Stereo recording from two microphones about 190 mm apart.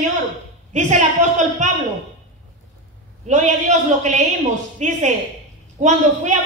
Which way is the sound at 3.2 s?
40° right (ahead or behind).